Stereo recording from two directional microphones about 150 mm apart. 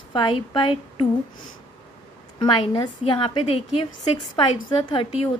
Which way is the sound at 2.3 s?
35° left (ahead or behind).